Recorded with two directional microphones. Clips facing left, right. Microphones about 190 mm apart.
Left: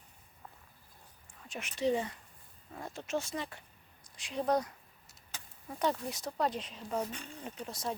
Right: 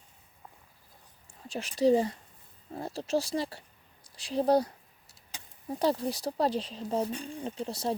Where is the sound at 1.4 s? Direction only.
35° right (ahead or behind).